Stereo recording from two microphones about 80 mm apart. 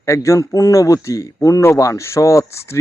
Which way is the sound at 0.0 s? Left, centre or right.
Left.